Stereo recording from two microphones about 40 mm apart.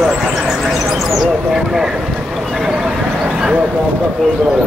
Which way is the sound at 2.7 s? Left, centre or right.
Right.